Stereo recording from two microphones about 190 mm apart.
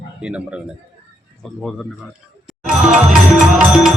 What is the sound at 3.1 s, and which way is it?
Music, 5° right (ahead or behind).